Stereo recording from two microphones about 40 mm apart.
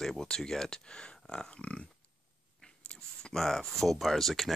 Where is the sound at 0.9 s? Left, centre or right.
Left.